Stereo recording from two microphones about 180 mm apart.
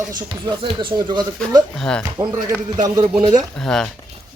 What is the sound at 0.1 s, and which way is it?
Speech, 25° right (ahead or behind).